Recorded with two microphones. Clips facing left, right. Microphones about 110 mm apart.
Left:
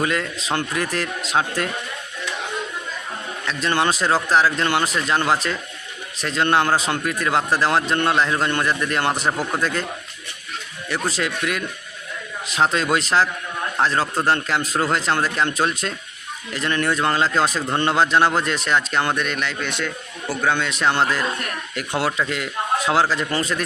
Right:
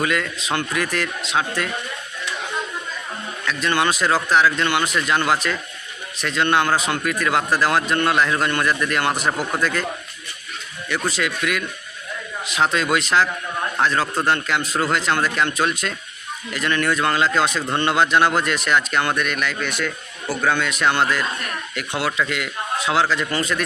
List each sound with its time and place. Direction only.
0.0 s speech: 30° left (ahead or behind)
3.4 s speech: 30° left (ahead or behind)
10.8 s speech: 35° left (ahead or behind)